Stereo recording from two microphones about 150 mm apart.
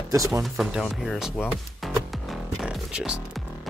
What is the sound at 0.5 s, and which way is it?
Speech, centre (ahead or behind).